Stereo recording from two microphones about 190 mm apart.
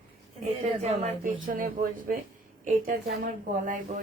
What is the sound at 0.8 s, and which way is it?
Speech, 40° right (ahead or behind).